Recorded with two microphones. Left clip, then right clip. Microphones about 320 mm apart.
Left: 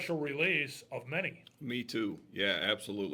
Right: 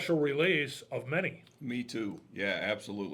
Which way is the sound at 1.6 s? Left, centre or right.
Left.